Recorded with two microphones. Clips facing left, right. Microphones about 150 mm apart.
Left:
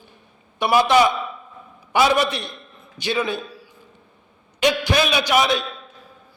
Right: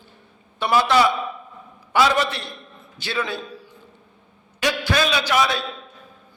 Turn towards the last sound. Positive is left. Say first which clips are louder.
# left 2 dB
turn(degrees=20)  # may be behind; listen again after turning